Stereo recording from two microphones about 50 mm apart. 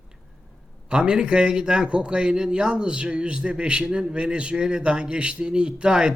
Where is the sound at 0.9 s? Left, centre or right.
Centre.